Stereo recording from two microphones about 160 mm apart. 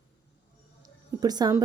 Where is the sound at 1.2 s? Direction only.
25° right (ahead or behind).